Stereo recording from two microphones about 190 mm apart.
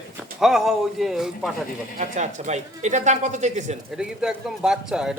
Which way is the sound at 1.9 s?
40° right (ahead or behind).